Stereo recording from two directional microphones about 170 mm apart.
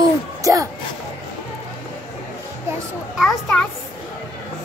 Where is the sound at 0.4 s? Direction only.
20° right (ahead or behind).